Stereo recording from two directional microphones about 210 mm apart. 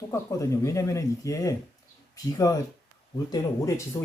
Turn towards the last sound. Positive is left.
turn(degrees=15)  # may be behind; listen again after turning